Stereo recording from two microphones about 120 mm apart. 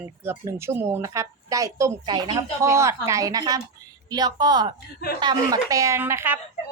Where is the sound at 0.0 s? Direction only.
20° right (ahead or behind); by 2.6 s 35° right (ahead or behind).